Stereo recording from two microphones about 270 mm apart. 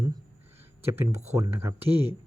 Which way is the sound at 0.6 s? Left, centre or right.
Centre.